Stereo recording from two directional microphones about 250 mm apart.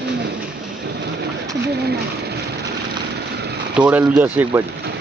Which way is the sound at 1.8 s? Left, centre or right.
Right.